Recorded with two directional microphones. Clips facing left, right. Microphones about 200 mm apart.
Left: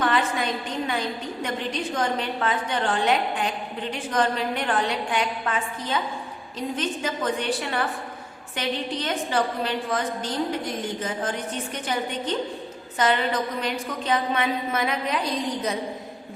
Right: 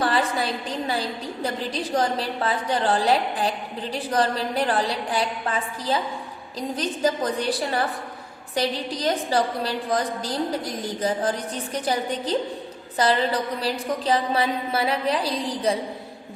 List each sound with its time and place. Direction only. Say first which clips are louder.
0.0 s a woman's voice: right 1 dB; 35° right (ahead or behind)